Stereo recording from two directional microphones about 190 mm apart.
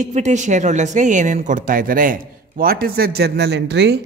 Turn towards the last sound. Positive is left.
turn(degrees=-65)  # may be behind; listen again after turning